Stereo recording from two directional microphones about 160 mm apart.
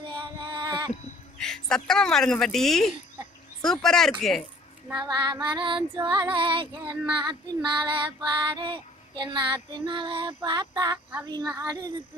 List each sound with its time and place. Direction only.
0.2 s a sound: 30° right (ahead or behind)
1.4 s speech: 5° left (ahead or behind)
4.9 s child singing: 25° right (ahead or behind)
6.3 s music: 30° right (ahead or behind)
7.2 s child singing: 25° right (ahead or behind)